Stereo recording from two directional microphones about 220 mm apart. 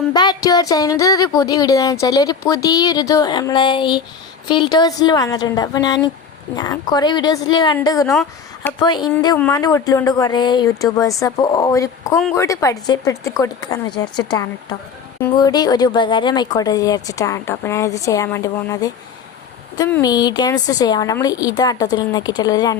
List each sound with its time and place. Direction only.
0.1 s a woman's voice: 20° left (ahead or behind)
8.1 s speech: centre (ahead or behind)
8.8 s a woman's voice: 20° left (ahead or behind)